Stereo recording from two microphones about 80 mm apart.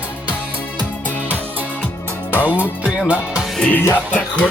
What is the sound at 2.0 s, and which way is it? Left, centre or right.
Music, left.